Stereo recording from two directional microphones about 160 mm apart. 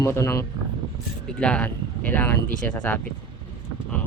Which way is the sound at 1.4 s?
5° left (ahead or behind).